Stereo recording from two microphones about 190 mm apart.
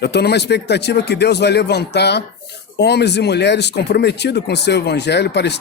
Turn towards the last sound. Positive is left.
turn(degrees=60)  # may be behind; listen again after turning